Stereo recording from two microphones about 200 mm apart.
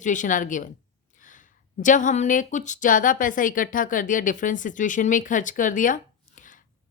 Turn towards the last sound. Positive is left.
turn(degrees=40)  # may be behind; listen again after turning